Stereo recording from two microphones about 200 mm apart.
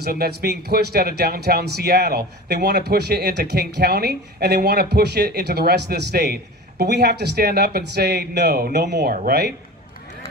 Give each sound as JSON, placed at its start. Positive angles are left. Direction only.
{"t": 0.0, "sound": "speech", "side_deg": -50}